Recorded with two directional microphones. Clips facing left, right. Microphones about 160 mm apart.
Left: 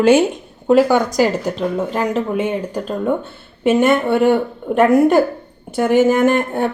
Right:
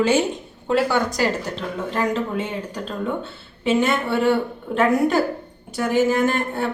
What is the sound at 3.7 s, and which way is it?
Speech, 50° left (ahead or behind).